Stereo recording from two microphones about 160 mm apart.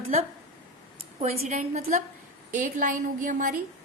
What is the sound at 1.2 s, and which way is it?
A woman's voice, 45° right (ahead or behind).